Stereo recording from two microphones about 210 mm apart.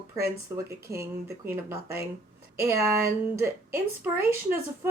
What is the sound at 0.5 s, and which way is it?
Speech, 15° right (ahead or behind).